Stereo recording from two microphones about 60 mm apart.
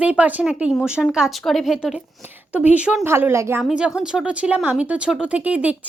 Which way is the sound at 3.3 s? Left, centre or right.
Right.